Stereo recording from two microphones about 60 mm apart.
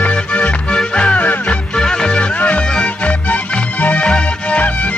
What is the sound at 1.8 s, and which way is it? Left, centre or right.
Music, centre.